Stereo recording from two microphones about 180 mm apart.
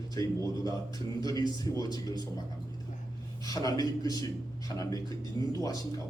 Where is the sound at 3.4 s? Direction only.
20° left (ahead or behind).